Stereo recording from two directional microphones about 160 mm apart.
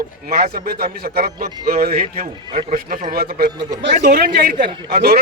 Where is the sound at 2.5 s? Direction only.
40° right (ahead or behind).